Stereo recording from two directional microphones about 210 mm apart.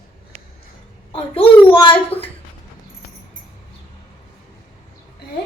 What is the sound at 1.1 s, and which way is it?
A child's voice, 25° left (ahead or behind).